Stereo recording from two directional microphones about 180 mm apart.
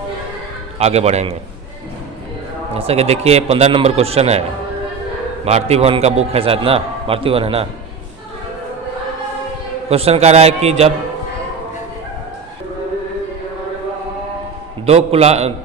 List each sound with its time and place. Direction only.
0.7 s a man's voice: 35° right (ahead or behind)
2.7 s a man's voice: 35° right (ahead or behind)
5.4 s a man's voice: 35° right (ahead or behind)
9.8 s a man's voice: 35° right (ahead or behind)
14.9 s a man's voice: 35° right (ahead or behind)